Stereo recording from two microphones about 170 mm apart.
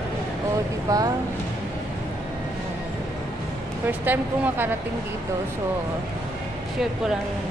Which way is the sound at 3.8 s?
10° right (ahead or behind).